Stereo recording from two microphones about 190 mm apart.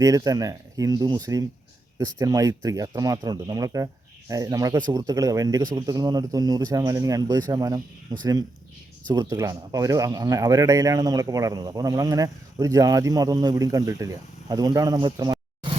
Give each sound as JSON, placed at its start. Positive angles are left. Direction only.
{"t": 0.0, "sound": "speech", "side_deg": -20}